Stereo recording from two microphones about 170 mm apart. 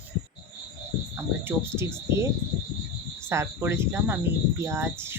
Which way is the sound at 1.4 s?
15° right (ahead or behind).